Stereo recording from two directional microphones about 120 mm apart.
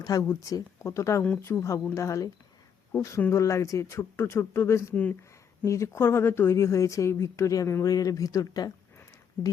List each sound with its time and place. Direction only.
0.0 s speech: 30° left (ahead or behind)
1.2 s speech: 10° left (ahead or behind)
1.5 s speech: 25° left (ahead or behind)